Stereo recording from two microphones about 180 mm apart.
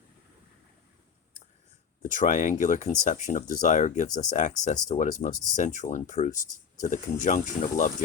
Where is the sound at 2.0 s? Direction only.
45° left (ahead or behind).